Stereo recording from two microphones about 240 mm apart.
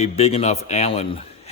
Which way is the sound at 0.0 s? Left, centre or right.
Left.